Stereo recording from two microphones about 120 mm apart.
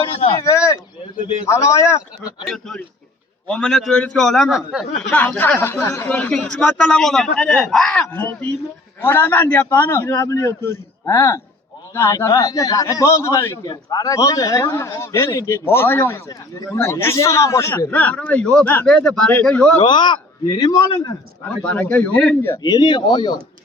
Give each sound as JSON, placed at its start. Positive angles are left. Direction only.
{"t": 0.3, "sound": "a sound", "side_deg": 30}
{"t": 1.5, "sound": "a man's voice", "side_deg": 25}
{"t": 2.5, "sound": "a man's voice", "side_deg": 5}
{"t": 5.0, "sound": "a man's voice", "side_deg": 10}
{"t": 19.8, "sound": "speech", "side_deg": 40}
{"t": 21.5, "sound": "a man's voice", "side_deg": 10}
{"t": 22.6, "sound": "speech", "side_deg": 35}